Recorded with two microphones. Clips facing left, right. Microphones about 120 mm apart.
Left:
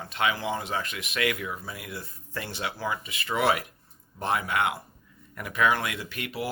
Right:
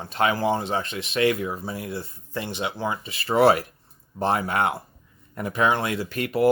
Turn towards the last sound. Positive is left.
turn(degrees=-45)  # may be behind; listen again after turning